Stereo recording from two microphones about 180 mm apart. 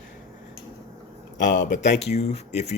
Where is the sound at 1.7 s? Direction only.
40° left (ahead or behind).